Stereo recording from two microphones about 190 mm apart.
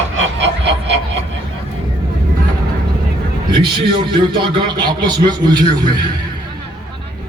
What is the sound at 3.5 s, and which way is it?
A man's voice, 25° right (ahead or behind).